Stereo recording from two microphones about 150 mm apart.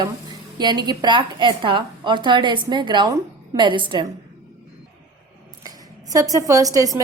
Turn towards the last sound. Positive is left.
turn(degrees=-25)  # may be behind; listen again after turning